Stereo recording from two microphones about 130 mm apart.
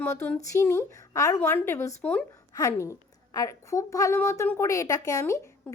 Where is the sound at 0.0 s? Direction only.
10° left (ahead or behind).